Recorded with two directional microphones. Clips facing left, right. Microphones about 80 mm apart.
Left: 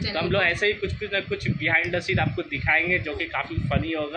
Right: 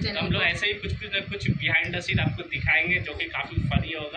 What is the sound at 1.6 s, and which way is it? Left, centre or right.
A man's voice, left.